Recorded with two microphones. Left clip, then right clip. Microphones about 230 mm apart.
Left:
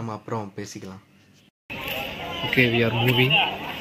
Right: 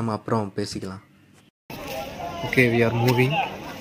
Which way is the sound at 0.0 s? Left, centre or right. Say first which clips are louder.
Right 5 dB; right.